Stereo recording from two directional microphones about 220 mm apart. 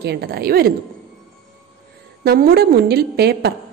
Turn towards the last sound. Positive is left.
turn(degrees=-45)  # may be behind; listen again after turning